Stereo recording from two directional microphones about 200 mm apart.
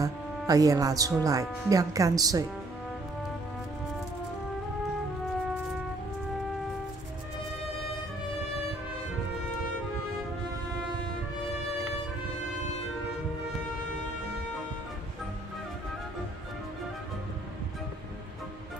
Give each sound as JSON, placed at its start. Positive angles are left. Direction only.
{"t": 0.0, "sound": "speech", "side_deg": -15}